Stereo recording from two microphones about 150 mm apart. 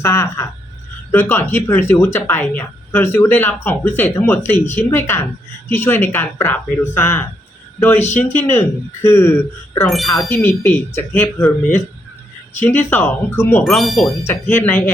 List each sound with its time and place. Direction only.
0.0 s a woman's voice: 15° left (ahead or behind)
9.9 s speech: centre (ahead or behind)
10.2 s a woman's voice: 15° left (ahead or behind)
12.6 s a woman's voice: 10° left (ahead or behind)
13.7 s speech: centre (ahead or behind)
14.3 s a woman's voice: 10° left (ahead or behind)